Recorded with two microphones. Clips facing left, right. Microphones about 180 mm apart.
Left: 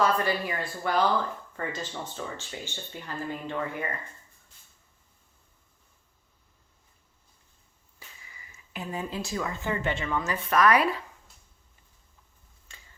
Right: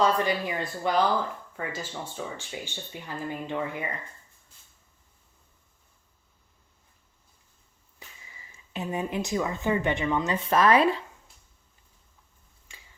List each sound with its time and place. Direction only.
0.0 s speech: 20° right (ahead or behind)
8.5 s speech: 20° right (ahead or behind)